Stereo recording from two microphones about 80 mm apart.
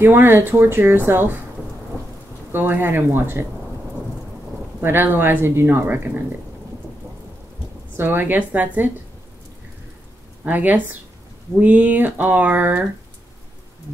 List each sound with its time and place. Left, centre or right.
0.0 s speech: right
2.5 s speech: right
4.8 s speech: right
8.0 s speech: right
10.4 s speech: right